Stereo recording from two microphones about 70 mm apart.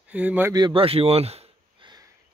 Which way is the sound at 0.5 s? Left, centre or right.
Right.